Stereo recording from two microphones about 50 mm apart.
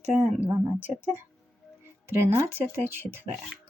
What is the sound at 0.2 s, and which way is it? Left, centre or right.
Speech, right.